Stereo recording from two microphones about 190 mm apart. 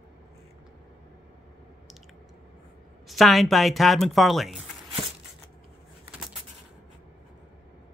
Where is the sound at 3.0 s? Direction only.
Centre (ahead or behind).